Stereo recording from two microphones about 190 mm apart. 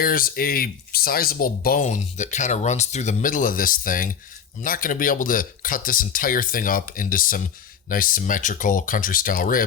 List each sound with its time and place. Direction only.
0.0 s speech: 50° left (ahead or behind)